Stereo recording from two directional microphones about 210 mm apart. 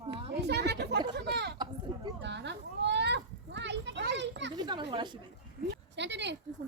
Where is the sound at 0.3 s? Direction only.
55° right (ahead or behind).